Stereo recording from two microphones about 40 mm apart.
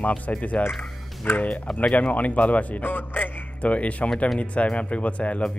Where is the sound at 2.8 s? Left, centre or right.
Left.